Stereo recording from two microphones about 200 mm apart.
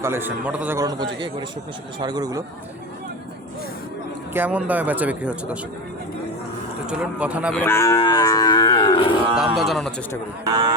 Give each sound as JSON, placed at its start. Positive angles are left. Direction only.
{"t": 0.0, "sound": "a man's voice", "side_deg": -10}
{"t": 4.4, "sound": "a man's voice", "side_deg": -5}
{"t": 6.8, "sound": "speech", "side_deg": -5}
{"t": 7.6, "sound": "cattle", "side_deg": 10}
{"t": 7.9, "sound": "livestock", "side_deg": 20}
{"t": 9.6, "sound": "speech", "side_deg": 0}
{"t": 10.4, "sound": "speech", "side_deg": -20}